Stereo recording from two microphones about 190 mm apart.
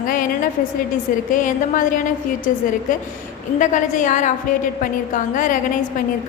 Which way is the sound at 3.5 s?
40° left (ahead or behind).